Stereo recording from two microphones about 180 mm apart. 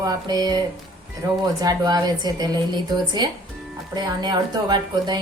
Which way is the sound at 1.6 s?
20° right (ahead or behind).